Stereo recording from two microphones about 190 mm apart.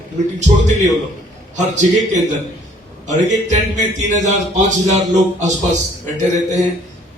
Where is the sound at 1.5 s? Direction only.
40° right (ahead or behind).